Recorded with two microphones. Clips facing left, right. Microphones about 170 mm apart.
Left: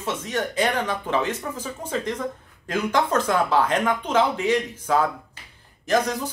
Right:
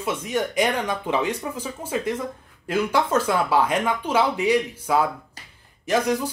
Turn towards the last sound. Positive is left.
turn(degrees=-10)  # may be behind; listen again after turning